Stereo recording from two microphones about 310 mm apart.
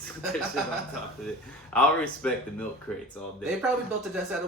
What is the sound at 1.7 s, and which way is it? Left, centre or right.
Speech, centre.